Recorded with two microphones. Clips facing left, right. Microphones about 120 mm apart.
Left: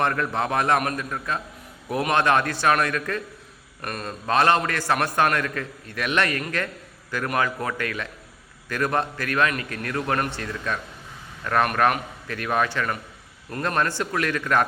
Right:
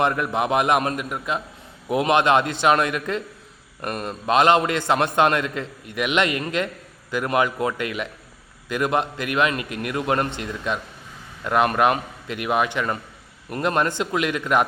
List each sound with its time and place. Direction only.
0.0 s a man's voice: 15° right (ahead or behind)